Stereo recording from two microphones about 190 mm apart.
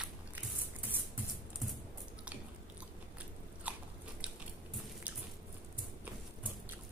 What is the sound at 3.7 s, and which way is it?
Biting, 5° right (ahead or behind).